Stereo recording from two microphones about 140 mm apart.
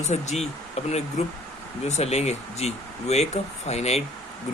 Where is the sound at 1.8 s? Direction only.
50° left (ahead or behind).